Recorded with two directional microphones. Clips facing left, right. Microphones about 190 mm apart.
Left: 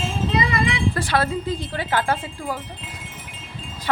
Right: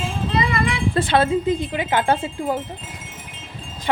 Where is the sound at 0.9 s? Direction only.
25° right (ahead or behind).